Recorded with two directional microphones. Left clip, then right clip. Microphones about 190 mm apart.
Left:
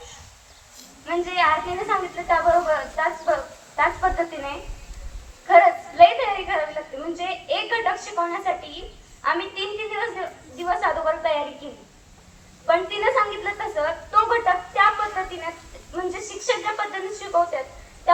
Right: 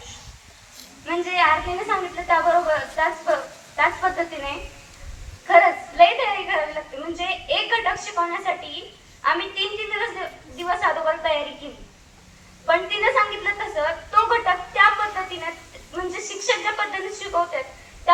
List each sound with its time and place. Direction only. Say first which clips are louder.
1.0 s a woman's voice: right 1 dB; 20° right (ahead or behind)
5.5 s a sound: left 1 dB; 25° right (ahead or behind)
7.0 s speech: right 3 dB; 25° right (ahead or behind)
12.6 s speech: right 1 dB; 25° right (ahead or behind)
16.5 s speech: right 1 dB; 25° right (ahead or behind)